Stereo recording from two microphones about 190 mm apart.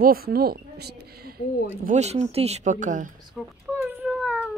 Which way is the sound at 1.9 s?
35° right (ahead or behind).